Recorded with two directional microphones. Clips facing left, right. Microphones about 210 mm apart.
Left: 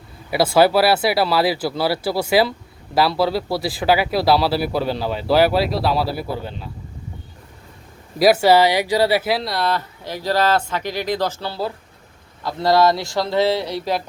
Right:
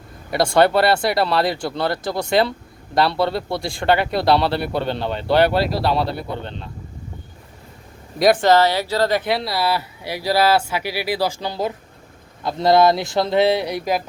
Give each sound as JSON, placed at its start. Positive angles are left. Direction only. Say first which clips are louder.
{"t": 0.3, "sound": "speech", "louder": "left 1 dB", "side_deg": 5}
{"t": 8.2, "sound": "speech", "louder": "left 1 dB", "side_deg": 5}